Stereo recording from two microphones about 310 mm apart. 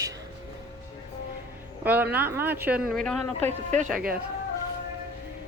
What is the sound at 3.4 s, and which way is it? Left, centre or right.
Speech, right.